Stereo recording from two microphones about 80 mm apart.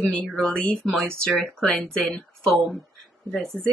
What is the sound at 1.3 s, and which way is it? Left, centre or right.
Speech, centre.